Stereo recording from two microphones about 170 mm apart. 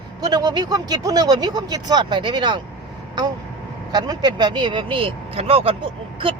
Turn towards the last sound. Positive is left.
turn(degrees=-35)  # may be behind; listen again after turning